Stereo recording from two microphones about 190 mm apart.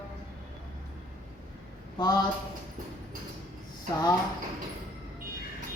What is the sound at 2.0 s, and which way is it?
Speech, 20° left (ahead or behind).